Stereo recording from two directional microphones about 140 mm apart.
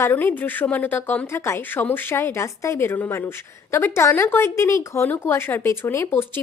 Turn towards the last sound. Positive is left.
turn(degrees=15)  # may be behind; listen again after turning